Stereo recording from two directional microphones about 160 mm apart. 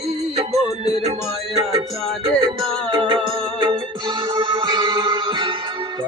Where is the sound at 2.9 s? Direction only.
30° right (ahead or behind).